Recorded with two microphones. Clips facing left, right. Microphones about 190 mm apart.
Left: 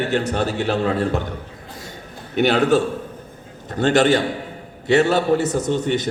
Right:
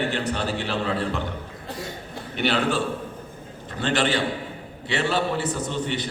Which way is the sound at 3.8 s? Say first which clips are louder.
Left 7 dB; 45° left (ahead or behind).